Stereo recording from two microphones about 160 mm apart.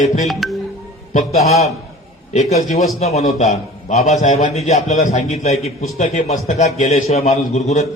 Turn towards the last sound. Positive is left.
turn(degrees=45)  # may be behind; listen again after turning